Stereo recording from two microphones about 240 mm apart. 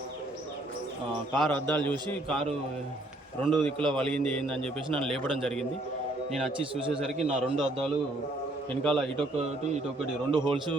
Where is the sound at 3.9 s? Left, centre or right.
Centre.